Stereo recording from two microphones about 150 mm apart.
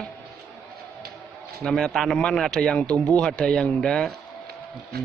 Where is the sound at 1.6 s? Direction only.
5° left (ahead or behind).